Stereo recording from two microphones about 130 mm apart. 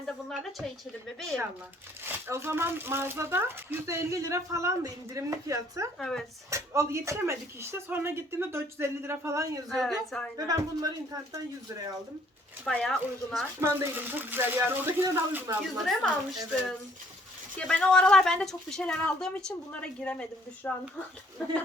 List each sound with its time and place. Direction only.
1.0 s speech: centre (ahead or behind)
2.0 s speech: 15° right (ahead or behind)
6.0 s speech: 5° left (ahead or behind)
6.5 s speech: 25° right (ahead or behind)
9.6 s speech: centre (ahead or behind)
10.3 s speech: 30° right (ahead or behind)
12.6 s speech: centre (ahead or behind)
13.6 s speech: 15° right (ahead or behind)
15.8 s speech: centre (ahead or behind)
17.6 s a woman's voice: 10° left (ahead or behind)